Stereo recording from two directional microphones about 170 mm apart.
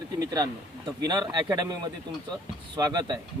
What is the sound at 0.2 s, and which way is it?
Speech, 20° right (ahead or behind).